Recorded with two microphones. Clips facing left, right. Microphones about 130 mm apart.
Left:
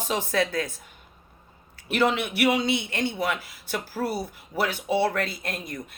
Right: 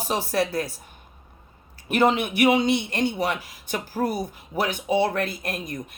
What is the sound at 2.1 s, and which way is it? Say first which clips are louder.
Speech: right 3 dB; 50° right (ahead or behind).